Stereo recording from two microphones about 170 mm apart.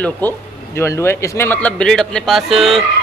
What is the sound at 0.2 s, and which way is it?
A man's voice, 10° left (ahead or behind).